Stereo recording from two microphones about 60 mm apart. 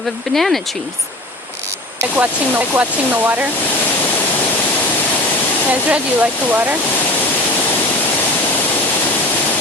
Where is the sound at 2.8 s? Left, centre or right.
Right.